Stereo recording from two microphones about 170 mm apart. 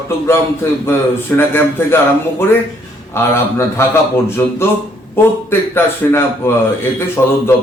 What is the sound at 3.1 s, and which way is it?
A man's voice, 15° left (ahead or behind).